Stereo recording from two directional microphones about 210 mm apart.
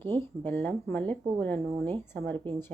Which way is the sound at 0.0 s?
10° left (ahead or behind).